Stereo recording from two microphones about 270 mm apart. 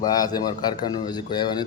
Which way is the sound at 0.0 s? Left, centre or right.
Centre.